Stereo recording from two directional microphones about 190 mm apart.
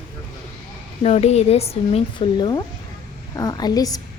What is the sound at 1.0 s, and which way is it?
A woman's voice, 35° left (ahead or behind).